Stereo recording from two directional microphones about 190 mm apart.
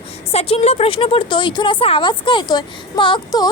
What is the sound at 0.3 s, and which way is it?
A woman's voice, 30° left (ahead or behind).